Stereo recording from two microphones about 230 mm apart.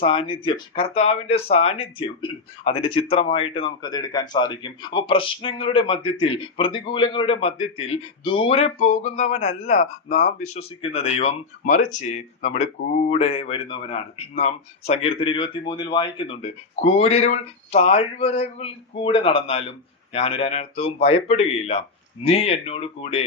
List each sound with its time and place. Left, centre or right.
0.0 s speech: left